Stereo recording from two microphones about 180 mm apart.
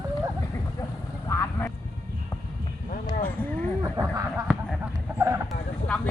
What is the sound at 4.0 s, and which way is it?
Speech, 10° right (ahead or behind).